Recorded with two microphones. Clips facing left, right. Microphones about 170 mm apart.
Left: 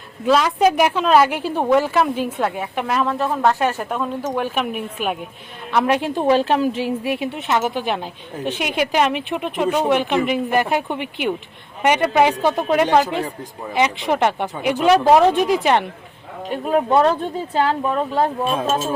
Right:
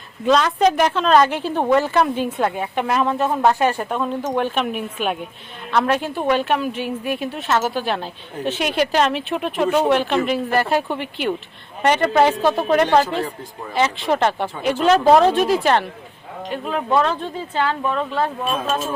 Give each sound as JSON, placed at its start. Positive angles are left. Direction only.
{"t": 0.3, "sound": "a woman's voice", "side_deg": 5}
{"t": 5.7, "sound": "a woman's voice", "side_deg": 15}
{"t": 17.1, "sound": "a woman's voice", "side_deg": 15}
{"t": 18.7, "sound": "a woman's voice", "side_deg": 25}